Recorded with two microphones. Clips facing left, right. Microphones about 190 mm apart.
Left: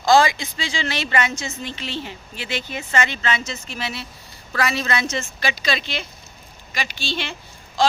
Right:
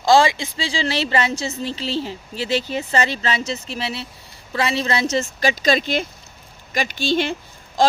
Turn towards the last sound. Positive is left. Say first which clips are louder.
# right 2 dB
turn(degrees=-50)  # may be behind; listen again after turning